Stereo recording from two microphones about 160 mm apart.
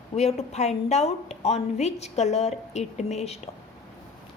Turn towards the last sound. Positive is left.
turn(degrees=40)  # may be behind; listen again after turning